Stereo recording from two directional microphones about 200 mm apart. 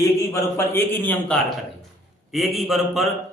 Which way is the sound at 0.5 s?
10° left (ahead or behind).